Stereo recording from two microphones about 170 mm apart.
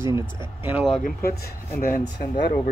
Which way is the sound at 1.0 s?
65° left (ahead or behind).